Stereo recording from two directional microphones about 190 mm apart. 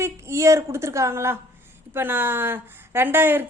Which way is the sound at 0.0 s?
15° right (ahead or behind).